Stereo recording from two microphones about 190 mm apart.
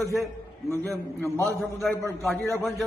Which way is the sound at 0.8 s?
Centre (ahead or behind).